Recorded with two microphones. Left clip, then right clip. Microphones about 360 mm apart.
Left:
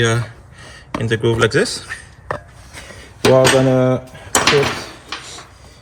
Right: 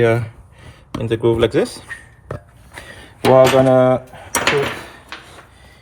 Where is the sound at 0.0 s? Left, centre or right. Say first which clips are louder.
Right 2 dB; centre.